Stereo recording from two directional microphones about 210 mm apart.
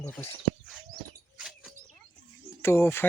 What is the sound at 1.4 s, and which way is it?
Bird, centre (ahead or behind).